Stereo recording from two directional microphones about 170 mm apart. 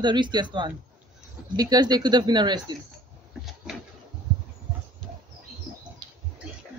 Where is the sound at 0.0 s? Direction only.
25° right (ahead or behind).